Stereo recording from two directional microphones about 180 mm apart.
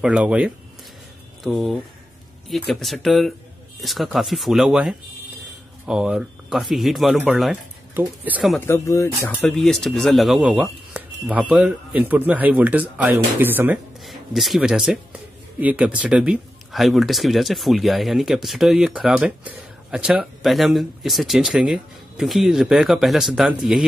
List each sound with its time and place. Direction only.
0.0 s speech: 5° right (ahead or behind)
8.5 s speech: 15° left (ahead or behind)
9.4 s speech: centre (ahead or behind)
14.0 s speech: centre (ahead or behind)